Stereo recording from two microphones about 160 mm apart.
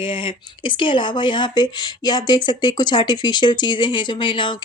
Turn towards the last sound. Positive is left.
turn(degrees=30)  # may be behind; listen again after turning